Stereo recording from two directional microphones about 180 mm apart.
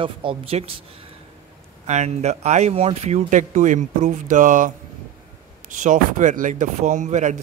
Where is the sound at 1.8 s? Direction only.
40° right (ahead or behind).